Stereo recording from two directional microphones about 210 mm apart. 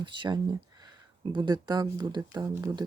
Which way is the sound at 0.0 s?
20° right (ahead or behind).